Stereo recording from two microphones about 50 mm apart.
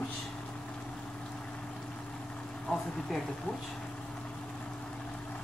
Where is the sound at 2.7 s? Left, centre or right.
Centre.